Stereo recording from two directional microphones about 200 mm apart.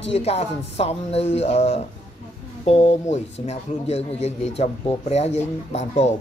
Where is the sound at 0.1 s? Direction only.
30° left (ahead or behind).